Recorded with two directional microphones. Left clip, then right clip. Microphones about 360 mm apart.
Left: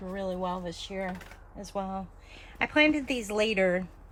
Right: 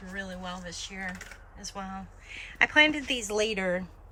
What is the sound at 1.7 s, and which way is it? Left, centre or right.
Speech, centre.